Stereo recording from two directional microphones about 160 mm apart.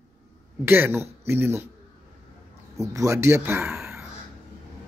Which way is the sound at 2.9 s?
20° right (ahead or behind).